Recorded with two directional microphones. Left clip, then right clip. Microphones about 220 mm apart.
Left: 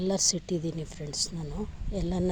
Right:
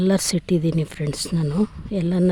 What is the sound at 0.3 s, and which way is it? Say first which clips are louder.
Speech: right 7 dB; 35° right (ahead or behind).